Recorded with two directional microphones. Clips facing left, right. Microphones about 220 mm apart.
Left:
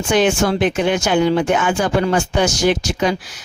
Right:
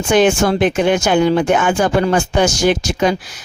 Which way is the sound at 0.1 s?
50° right (ahead or behind).